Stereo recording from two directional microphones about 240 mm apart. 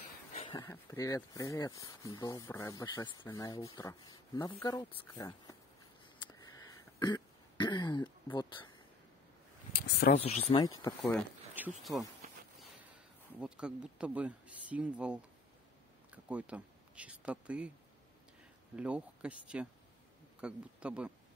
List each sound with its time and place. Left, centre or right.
0.3 s speech: left
7.0 s throat clearing: centre
9.8 s speech: left
10.2 s speech: left
10.6 s speech: centre
11.5 s speech: centre
13.4 s speech: centre
16.3 s speech: centre
18.8 s speech: centre